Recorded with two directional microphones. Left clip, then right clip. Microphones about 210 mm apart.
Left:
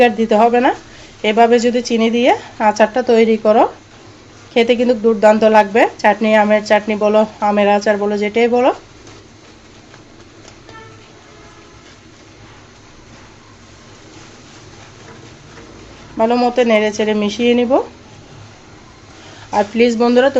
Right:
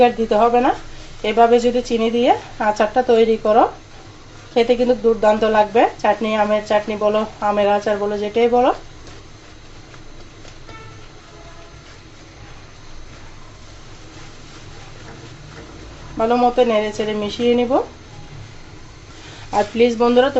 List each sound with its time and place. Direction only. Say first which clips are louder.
0.0 s speech: left 3 dB; 30° left (ahead or behind)
16.1 s speech: left 2 dB; 20° left (ahead or behind)
19.5 s speech: left 3 dB; 15° left (ahead or behind)
19.8 s speech: left 2 dB; 25° left (ahead or behind)